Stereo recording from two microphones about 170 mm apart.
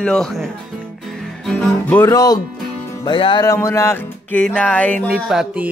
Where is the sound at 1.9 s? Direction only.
15° left (ahead or behind).